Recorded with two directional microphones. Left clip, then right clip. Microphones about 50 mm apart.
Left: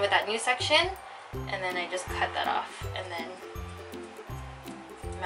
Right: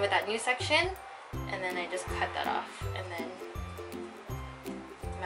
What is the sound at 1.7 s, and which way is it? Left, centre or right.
Speech, centre.